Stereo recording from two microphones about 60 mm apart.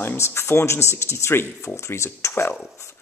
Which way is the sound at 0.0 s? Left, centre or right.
Left.